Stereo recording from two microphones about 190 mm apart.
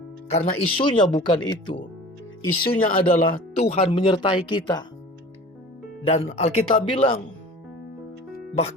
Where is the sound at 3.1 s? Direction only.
30° left (ahead or behind).